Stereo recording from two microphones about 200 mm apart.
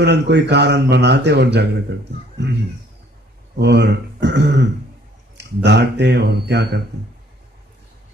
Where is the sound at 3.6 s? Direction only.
55° right (ahead or behind).